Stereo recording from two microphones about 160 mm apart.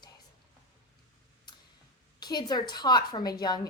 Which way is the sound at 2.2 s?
25° left (ahead or behind).